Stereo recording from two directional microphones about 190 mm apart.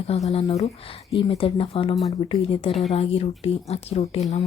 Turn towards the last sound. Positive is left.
turn(degrees=35)  # may be behind; listen again after turning